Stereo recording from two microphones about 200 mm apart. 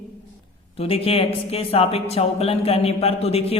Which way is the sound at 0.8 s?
30° left (ahead or behind).